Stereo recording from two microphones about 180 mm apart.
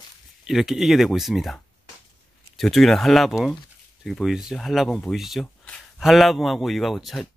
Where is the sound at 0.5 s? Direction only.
Centre (ahead or behind).